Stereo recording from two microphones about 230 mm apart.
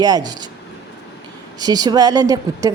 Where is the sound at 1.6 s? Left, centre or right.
Centre.